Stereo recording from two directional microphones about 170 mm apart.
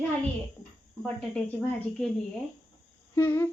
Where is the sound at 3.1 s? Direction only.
10° left (ahead or behind).